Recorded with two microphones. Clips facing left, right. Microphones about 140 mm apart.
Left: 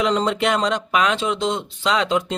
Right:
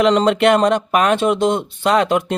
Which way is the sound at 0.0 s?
70° right (ahead or behind).